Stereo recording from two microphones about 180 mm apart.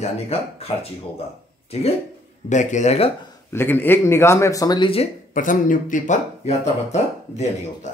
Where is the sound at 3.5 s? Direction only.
10° left (ahead or behind); by 5.0 s 30° left (ahead or behind).